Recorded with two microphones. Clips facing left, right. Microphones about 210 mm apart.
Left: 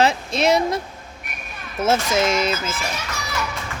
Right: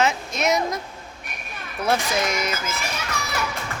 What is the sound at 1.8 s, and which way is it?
Speech, 25° left (ahead or behind).